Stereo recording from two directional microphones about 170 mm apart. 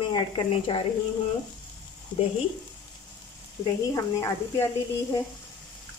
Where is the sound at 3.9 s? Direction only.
20° left (ahead or behind).